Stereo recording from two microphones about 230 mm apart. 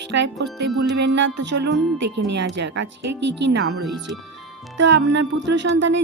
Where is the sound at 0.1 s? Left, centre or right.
Right.